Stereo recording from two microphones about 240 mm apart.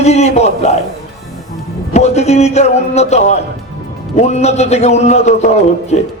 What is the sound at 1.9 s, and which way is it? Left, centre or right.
A man's voice, left.